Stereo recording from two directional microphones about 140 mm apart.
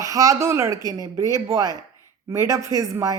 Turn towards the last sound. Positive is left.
turn(degrees=-25)  # may be behind; listen again after turning